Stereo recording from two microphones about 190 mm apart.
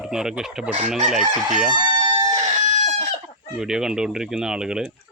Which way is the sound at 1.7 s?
20° right (ahead or behind).